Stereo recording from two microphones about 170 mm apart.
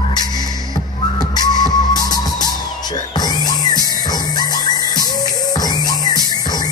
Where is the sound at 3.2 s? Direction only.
25° left (ahead or behind).